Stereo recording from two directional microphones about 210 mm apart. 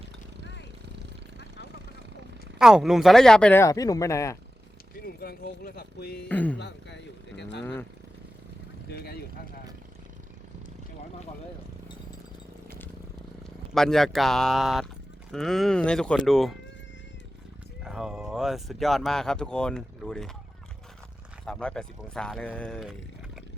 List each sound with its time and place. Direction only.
2.6 s speech: centre (ahead or behind); by 4.4 s 15° left (ahead or behind)
5.0 s speech: 45° left (ahead or behind)
6.2 s speech: 5° left (ahead or behind)
6.6 s speech: 55° left (ahead or behind)
7.6 s speech: 10° left (ahead or behind)
8.9 s speech: 50° left (ahead or behind)
13.7 s speech: centre (ahead or behind)
17.8 s speech: 5° right (ahead or behind)
21.4 s speech: 5° left (ahead or behind)